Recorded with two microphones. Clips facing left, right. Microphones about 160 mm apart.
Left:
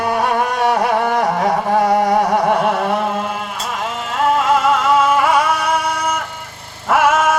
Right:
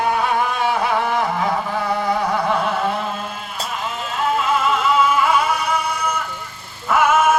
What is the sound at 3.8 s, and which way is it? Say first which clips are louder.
Music: left 5 dB; 65° left (ahead or behind).